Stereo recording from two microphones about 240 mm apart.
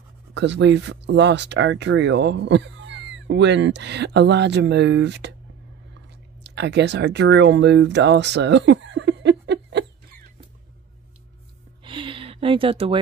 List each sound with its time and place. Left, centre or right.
0.3 s speech: right
6.4 s speech: right
11.8 s a sound: right